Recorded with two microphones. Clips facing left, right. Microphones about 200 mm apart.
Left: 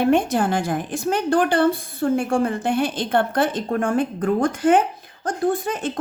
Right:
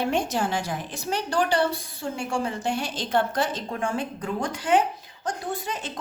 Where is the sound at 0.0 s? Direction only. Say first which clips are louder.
Left 7 dB; 55° left (ahead or behind).